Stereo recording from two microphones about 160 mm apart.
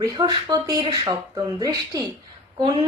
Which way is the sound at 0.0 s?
25° right (ahead or behind).